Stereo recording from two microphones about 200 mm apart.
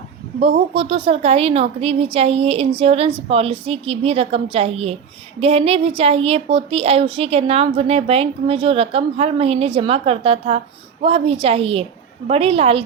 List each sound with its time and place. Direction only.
0.3 s a woman's voice: 30° right (ahead or behind)